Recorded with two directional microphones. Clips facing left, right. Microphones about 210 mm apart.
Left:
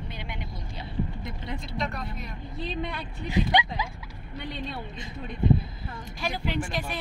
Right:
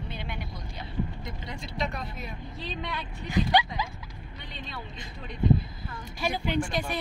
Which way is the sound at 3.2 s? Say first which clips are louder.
Even; 30° left (ahead or behind).